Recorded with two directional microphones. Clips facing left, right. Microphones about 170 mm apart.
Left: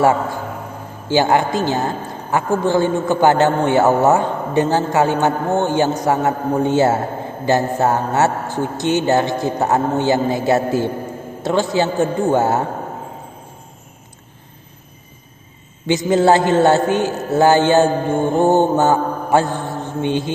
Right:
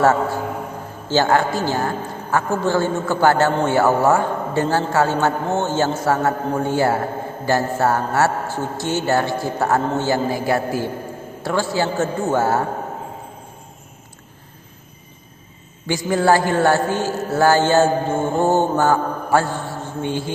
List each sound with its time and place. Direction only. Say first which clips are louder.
1.0 s a woman's voice: left 2 dB; 15° left (ahead or behind)
15.9 s a man's voice: left 3 dB; 20° left (ahead or behind)